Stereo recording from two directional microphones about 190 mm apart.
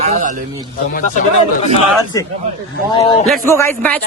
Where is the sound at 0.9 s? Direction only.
40° left (ahead or behind).